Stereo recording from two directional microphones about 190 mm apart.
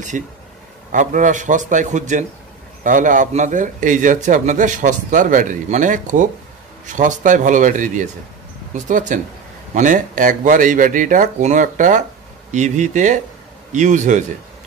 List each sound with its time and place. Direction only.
0.1 s a man's voice: 40° right (ahead or behind)